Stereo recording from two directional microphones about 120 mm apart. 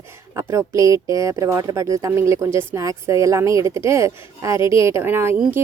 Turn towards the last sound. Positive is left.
turn(degrees=-15)  # may be behind; listen again after turning